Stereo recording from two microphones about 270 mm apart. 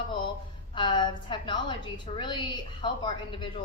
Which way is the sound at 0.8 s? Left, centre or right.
Centre.